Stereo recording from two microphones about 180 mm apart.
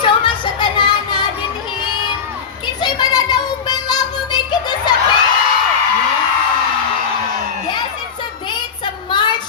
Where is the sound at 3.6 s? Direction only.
20° left (ahead or behind).